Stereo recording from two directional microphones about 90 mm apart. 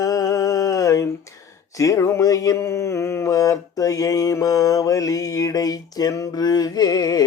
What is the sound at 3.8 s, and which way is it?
Mantra, 40° left (ahead or behind).